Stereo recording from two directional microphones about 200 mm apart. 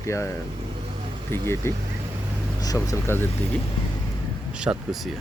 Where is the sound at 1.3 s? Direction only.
10° left (ahead or behind).